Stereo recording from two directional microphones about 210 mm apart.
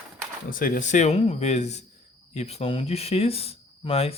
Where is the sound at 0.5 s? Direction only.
40° left (ahead or behind).